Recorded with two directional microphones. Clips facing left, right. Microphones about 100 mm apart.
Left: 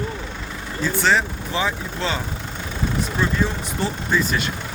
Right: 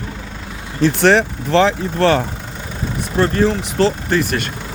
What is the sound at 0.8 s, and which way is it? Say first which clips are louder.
Speech: right 7 dB; 75° right (ahead or behind).